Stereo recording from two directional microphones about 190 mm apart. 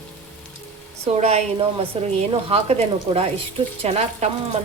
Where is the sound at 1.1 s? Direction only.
35° right (ahead or behind).